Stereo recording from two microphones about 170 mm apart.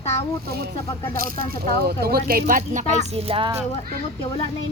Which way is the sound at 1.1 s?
65° right (ahead or behind).